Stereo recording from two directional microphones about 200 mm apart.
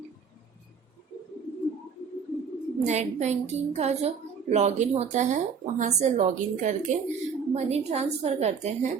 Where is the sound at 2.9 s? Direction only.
35° right (ahead or behind).